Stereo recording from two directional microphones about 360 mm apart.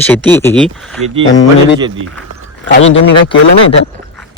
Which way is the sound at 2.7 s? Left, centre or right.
Left.